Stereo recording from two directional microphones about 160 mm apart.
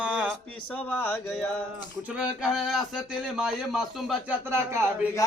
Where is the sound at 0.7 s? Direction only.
10° left (ahead or behind).